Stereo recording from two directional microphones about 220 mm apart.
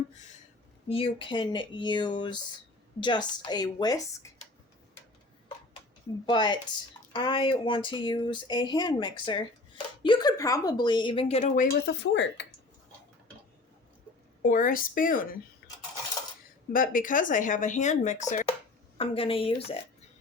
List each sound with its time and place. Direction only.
0.9 s a woman's voice: 25° left (ahead or behind)
6.2 s a woman's voice: 20° left (ahead or behind); by 12.5 s 55° left (ahead or behind)
14.4 s speech: 40° left (ahead or behind)
16.7 s a woman's voice: 40° left (ahead or behind)